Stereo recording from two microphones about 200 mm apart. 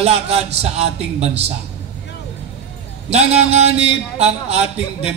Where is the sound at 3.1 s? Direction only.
30° right (ahead or behind).